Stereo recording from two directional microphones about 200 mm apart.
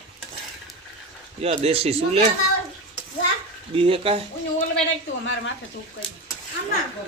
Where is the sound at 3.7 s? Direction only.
25° right (ahead or behind).